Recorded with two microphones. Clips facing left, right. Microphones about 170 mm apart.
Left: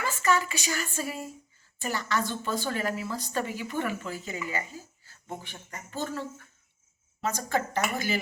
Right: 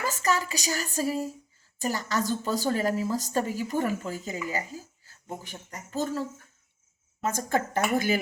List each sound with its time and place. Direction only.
0.0 s a woman's voice: 40° right (ahead or behind)
5.4 s a woman's voice: 40° right (ahead or behind)
7.2 s speech: 50° right (ahead or behind)